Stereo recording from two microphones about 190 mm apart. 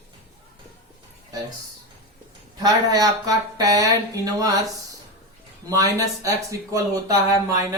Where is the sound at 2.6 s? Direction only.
20° right (ahead or behind).